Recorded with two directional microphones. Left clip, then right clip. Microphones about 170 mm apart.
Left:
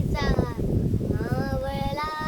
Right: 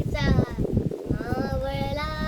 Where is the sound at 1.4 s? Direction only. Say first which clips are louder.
Right 1 dB; 25° left (ahead or behind).